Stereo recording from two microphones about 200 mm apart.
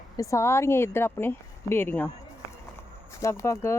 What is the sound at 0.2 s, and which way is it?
Speech, 15° left (ahead or behind).